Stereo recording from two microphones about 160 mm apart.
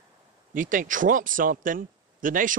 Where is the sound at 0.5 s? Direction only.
55° right (ahead or behind).